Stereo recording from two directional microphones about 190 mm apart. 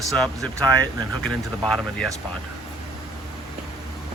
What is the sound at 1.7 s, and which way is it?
Speech, centre (ahead or behind).